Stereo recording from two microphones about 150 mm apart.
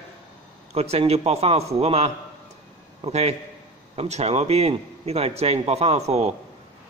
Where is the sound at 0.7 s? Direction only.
45° right (ahead or behind).